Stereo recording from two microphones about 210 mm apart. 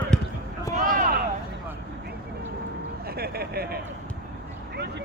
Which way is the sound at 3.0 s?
45° right (ahead or behind).